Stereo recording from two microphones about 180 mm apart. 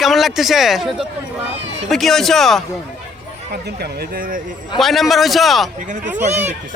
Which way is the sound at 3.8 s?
55° right (ahead or behind).